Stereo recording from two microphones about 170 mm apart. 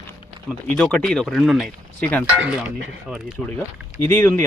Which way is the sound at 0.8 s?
5° left (ahead or behind).